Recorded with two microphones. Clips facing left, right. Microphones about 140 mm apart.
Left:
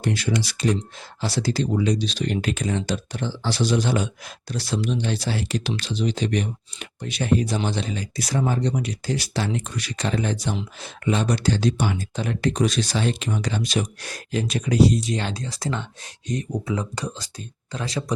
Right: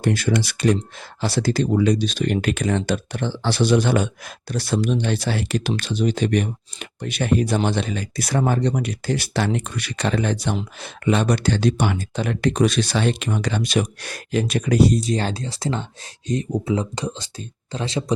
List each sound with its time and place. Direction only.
0.0 s speech: 50° right (ahead or behind); by 18.0 s 25° right (ahead or behind)